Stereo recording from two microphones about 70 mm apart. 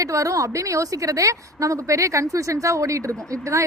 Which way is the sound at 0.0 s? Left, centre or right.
Right.